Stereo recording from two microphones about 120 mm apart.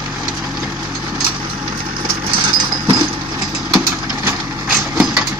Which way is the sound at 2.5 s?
35° right (ahead or behind).